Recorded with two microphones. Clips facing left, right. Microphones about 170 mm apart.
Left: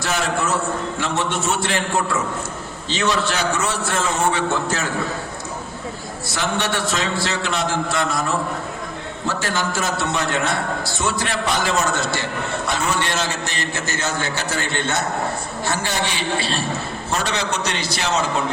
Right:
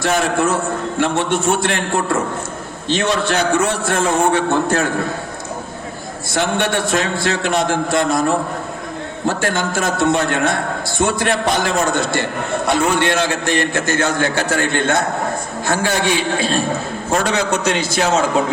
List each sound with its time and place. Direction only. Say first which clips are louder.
0.0 s a man's voice: right 6 dB; 55° right (ahead or behind)
6.2 s a man's voice: right 5 dB; 55° right (ahead or behind)